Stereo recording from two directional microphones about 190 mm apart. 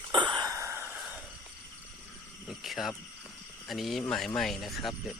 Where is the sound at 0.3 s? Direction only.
15° right (ahead or behind).